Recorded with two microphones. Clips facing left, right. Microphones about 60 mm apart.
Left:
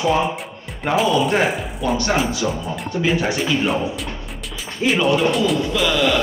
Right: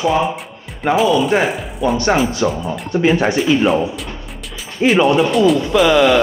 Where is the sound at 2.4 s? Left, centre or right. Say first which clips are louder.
Right 5 dB; right.